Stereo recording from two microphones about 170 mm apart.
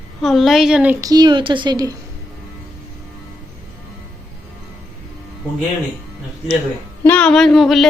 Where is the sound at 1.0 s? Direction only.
25° right (ahead or behind).